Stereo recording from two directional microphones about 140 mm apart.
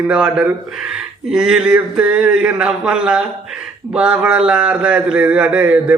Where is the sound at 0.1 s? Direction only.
5° right (ahead or behind).